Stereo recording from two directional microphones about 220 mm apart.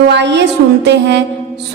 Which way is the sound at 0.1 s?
50° right (ahead or behind).